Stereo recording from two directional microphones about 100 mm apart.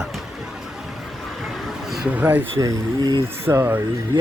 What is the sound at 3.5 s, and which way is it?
Speech, 20° right (ahead or behind).